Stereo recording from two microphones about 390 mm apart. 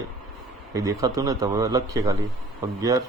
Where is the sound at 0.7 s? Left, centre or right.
Centre.